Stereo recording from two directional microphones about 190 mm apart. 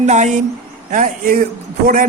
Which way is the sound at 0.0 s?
40° right (ahead or behind).